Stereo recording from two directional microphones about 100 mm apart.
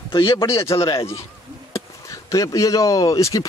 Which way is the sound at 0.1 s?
55° left (ahead or behind).